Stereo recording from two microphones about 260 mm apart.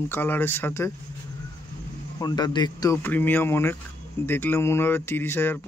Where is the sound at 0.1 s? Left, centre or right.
Centre.